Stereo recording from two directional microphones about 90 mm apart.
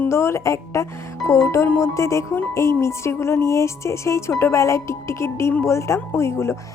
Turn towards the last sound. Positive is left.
turn(degrees=30)  # may be behind; listen again after turning